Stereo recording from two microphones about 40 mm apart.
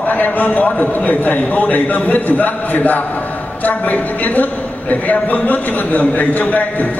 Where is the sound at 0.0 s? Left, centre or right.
Left.